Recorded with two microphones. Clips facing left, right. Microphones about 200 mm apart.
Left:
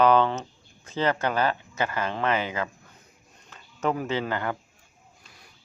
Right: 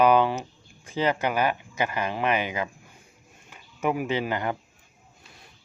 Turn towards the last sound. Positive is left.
turn(degrees=-15)  # may be behind; listen again after turning